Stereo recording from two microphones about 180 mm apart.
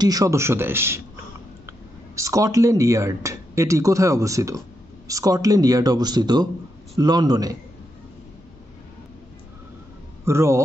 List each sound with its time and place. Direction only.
0.0 s speech: 20° right (ahead or behind)
2.1 s a man's voice: 15° right (ahead or behind)
10.2 s speech: 15° right (ahead or behind)